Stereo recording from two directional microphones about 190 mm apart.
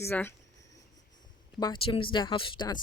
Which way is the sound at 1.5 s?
25° left (ahead or behind).